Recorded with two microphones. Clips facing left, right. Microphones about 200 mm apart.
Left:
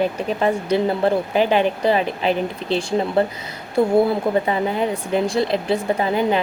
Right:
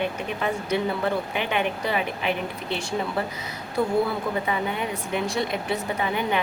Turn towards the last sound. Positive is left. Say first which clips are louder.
# left 7 dB
turn(degrees=35)  # may be behind; listen again after turning